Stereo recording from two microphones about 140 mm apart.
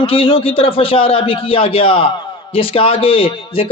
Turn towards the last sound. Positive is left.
turn(degrees=40)  # may be behind; listen again after turning